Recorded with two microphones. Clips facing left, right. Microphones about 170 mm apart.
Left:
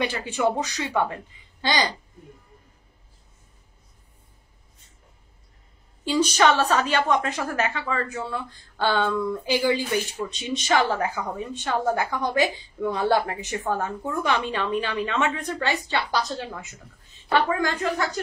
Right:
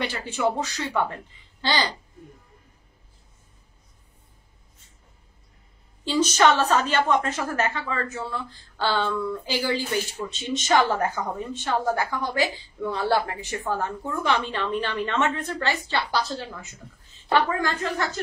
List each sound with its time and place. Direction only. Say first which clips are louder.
0.0 s a woman's voice: left 2 dB; 15° left (ahead or behind)
6.0 s a woman's voice: even; 10° left (ahead or behind)